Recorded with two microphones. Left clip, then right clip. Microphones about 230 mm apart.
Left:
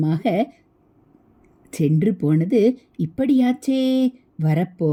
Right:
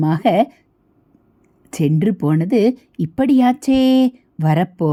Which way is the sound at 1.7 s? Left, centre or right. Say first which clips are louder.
Right 2 dB; centre.